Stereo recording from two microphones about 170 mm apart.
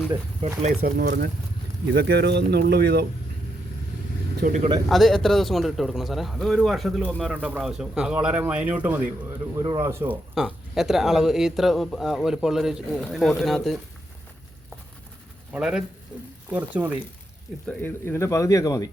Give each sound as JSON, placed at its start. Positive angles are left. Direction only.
{"t": 0.8, "sound": "speech", "side_deg": -65}
{"t": 4.4, "sound": "speech", "side_deg": -50}
{"t": 4.9, "sound": "speech", "side_deg": 0}
{"t": 10.3, "sound": "speech", "side_deg": 0}
{"t": 15.5, "sound": "speech", "side_deg": -5}
{"t": 17.7, "sound": "a man's voice", "side_deg": 10}